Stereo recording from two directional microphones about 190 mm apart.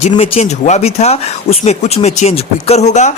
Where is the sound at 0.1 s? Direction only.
35° left (ahead or behind).